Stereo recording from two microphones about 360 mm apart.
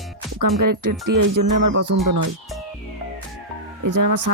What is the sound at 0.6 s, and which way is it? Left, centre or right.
Speech, right.